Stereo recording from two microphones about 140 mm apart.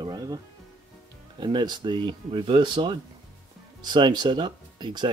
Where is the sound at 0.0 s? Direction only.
30° right (ahead or behind).